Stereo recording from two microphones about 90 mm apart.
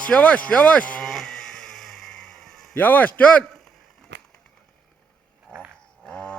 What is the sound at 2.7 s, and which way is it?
Speech, 20° left (ahead or behind).